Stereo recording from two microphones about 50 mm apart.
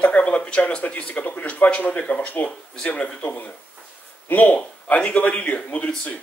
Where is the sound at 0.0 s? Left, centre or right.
Left.